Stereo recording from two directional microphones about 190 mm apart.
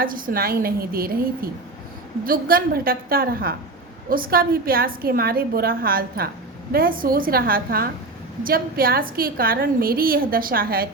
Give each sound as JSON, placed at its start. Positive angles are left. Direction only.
{"t": 0.0, "sound": "a woman's voice", "side_deg": -50}